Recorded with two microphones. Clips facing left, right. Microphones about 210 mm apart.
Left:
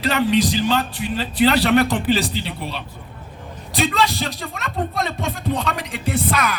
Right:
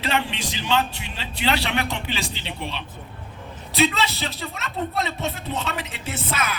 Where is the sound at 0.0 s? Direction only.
40° left (ahead or behind).